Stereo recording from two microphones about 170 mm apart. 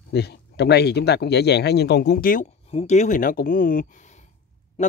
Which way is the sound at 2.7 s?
40° left (ahead or behind).